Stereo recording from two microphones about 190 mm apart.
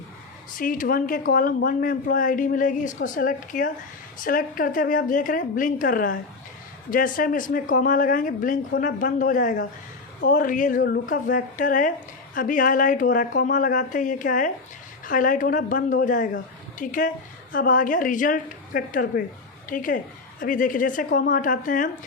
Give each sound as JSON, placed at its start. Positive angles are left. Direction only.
{"t": 0.5, "sound": "speech", "side_deg": 45}